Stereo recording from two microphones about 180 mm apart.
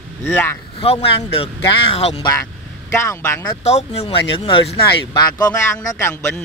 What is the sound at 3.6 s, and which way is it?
Speech, 35° left (ahead or behind).